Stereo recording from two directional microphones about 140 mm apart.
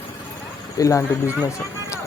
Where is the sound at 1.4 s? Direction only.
20° left (ahead or behind).